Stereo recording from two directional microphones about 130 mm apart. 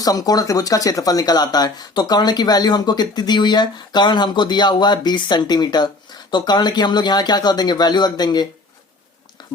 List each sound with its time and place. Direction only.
0.0 s speech: 30° left (ahead or behind)